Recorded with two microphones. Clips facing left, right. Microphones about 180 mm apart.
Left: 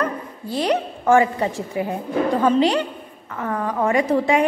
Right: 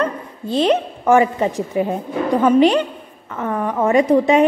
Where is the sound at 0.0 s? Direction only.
20° right (ahead or behind).